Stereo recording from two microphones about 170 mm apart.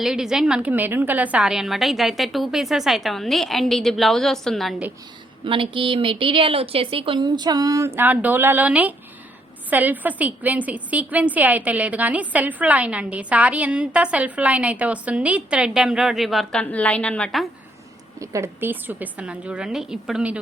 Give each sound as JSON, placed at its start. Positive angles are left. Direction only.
{"t": 0.0, "sound": "a woman's voice", "side_deg": 0}
{"t": 5.5, "sound": "a woman's voice", "side_deg": -30}
{"t": 18.2, "sound": "a woman's voice", "side_deg": -20}